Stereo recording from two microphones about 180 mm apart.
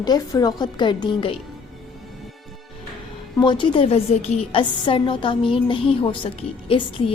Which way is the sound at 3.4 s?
25° left (ahead or behind).